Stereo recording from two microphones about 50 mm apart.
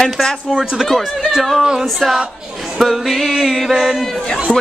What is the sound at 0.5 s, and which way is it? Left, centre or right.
Speech, centre.